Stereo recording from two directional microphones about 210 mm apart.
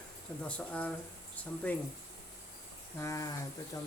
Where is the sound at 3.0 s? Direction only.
15° left (ahead or behind).